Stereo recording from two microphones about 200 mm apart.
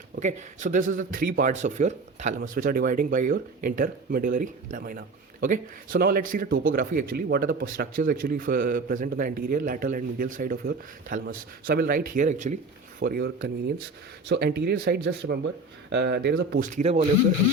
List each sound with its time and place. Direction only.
0.2 s a man's voice: 35° right (ahead or behind)
13.0 s a man's voice: 50° right (ahead or behind)
16.6 s speech: 35° right (ahead or behind)